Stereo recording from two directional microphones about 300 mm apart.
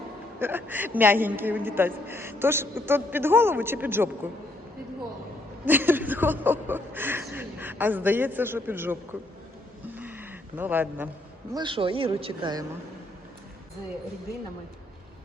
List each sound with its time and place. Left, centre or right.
0.3 s a woman's voice: centre
5.6 s speech: centre
9.9 s a sound: centre
11.5 s a woman's voice: centre